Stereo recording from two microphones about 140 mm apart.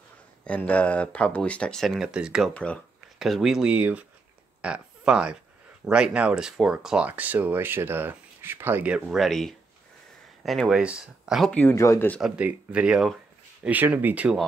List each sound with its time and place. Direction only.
0.4 s speech: 10° left (ahead or behind)
2.5 s speech: 10° left (ahead or behind)
3.2 s speech: centre (ahead or behind)
11.7 s speech: 20° left (ahead or behind)
12.2 s speech: 5° right (ahead or behind)